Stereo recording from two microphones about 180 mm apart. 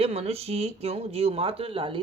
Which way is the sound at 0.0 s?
35° right (ahead or behind).